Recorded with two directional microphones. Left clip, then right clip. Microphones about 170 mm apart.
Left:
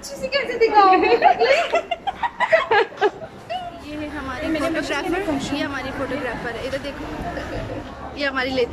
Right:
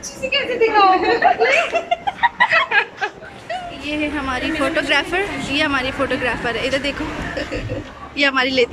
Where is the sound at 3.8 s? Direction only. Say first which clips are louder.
Right 8 dB; 5° right (ahead or behind).